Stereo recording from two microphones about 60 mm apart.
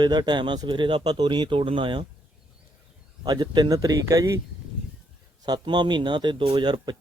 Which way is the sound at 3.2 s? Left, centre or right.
Right.